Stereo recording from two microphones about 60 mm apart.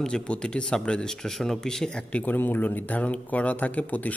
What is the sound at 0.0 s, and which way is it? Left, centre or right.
Speech, centre.